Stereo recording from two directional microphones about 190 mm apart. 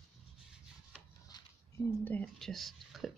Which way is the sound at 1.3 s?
20° left (ahead or behind).